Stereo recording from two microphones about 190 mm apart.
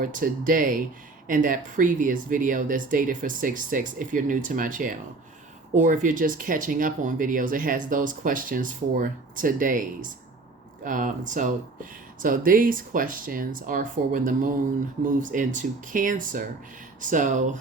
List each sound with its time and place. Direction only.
0.0 s speech: 45° right (ahead or behind)
10.8 s speech: 40° right (ahead or behind)